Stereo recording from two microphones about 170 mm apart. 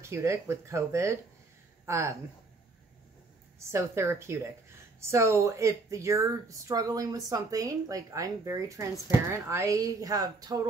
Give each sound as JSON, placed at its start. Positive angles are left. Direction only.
{"t": 0.0, "sound": "speech", "side_deg": -15}
{"t": 3.5, "sound": "speech", "side_deg": -15}